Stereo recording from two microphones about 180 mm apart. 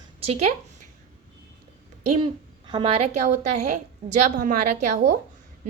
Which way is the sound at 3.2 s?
45° right (ahead or behind).